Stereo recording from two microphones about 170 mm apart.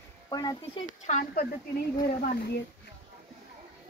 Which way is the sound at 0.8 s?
45° left (ahead or behind).